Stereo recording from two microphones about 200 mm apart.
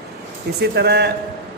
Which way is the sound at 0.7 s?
55° right (ahead or behind).